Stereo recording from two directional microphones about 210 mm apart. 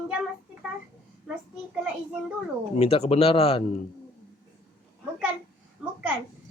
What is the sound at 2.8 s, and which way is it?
Speech, 30° left (ahead or behind).